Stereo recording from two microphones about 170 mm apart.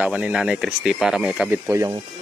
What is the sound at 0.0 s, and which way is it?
Speech, 5° right (ahead or behind).